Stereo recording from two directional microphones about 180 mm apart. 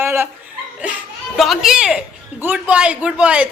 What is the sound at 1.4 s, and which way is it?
A man's voice, centre (ahead or behind).